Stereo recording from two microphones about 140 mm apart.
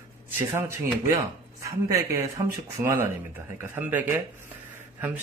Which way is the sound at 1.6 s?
20° right (ahead or behind).